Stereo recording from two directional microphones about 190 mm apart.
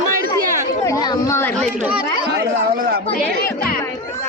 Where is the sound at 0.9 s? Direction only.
20° left (ahead or behind).